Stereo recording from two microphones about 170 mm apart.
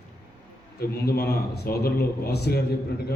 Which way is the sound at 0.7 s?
65° left (ahead or behind).